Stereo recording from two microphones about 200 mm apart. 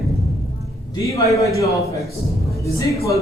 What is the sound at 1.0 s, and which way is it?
Speech, 15° left (ahead or behind).